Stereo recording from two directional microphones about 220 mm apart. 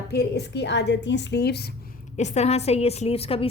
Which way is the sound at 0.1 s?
50° left (ahead or behind).